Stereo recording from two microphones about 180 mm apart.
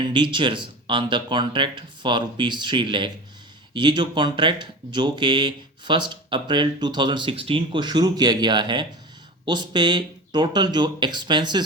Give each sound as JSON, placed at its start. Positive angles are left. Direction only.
{"t": 0.0, "sound": "speech", "side_deg": -25}